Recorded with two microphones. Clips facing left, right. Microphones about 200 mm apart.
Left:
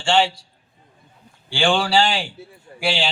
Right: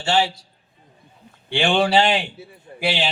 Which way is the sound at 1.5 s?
20° right (ahead or behind).